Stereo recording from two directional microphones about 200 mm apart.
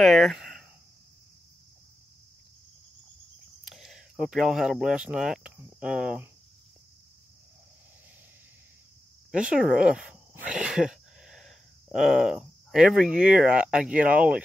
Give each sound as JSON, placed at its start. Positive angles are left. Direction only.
{"t": 0.0, "sound": "speech", "side_deg": 0}
{"t": 3.6, "sound": "speech", "side_deg": 0}
{"t": 9.3, "sound": "speech", "side_deg": -5}